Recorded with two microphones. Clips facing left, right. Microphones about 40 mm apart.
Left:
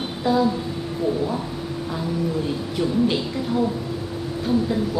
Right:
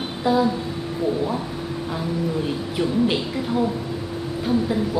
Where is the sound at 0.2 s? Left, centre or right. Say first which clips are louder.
Even; centre.